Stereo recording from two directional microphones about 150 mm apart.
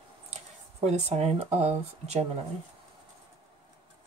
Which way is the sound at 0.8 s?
45° right (ahead or behind).